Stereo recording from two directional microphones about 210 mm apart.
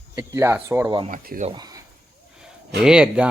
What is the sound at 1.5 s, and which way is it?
Speech, 20° right (ahead or behind).